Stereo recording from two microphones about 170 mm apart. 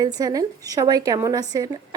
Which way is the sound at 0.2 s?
20° right (ahead or behind).